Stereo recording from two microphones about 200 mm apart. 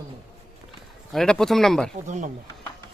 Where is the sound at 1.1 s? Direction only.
5° left (ahead or behind).